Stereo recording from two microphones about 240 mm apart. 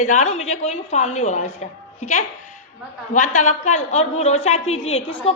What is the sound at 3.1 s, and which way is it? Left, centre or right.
A woman's voice, left.